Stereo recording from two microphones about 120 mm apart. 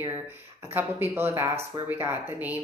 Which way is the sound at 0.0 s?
20° right (ahead or behind).